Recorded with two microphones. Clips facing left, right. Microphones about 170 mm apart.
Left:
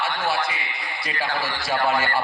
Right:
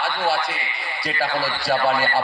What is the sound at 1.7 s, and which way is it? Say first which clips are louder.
Speech: right 2 dB; 35° right (ahead or behind).